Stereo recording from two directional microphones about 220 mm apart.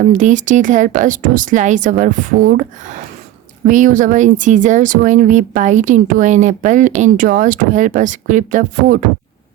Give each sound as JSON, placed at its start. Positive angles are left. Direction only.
{"t": 0.1, "sound": "speech", "side_deg": -35}